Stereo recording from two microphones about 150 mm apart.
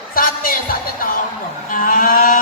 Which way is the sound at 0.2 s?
70° left (ahead or behind).